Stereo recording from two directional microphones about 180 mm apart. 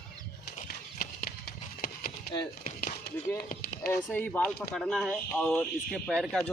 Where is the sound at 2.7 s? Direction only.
50° left (ahead or behind).